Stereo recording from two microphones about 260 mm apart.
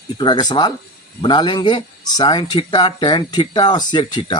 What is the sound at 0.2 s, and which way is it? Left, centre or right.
Speech, centre.